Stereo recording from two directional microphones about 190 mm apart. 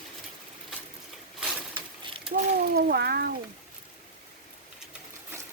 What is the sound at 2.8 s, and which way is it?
Speech, 60° right (ahead or behind).